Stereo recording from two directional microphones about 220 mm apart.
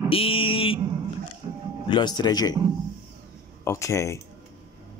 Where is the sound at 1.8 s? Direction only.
20° left (ahead or behind).